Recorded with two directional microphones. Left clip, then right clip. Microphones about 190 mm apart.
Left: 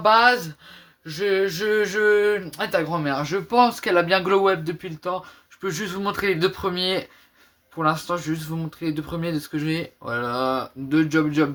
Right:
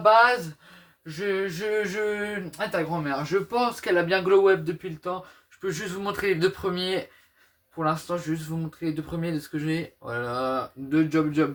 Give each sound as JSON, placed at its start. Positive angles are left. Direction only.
{"t": 1.0, "sound": "speech", "side_deg": 55}